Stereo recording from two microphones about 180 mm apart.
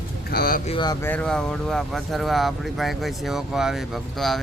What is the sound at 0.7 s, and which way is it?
Speech, 25° left (ahead or behind).